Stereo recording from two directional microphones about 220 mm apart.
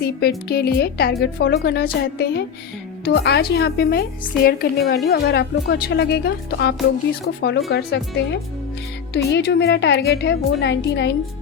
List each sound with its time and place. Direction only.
0.0 s a woman's voice: 45° left (ahead or behind)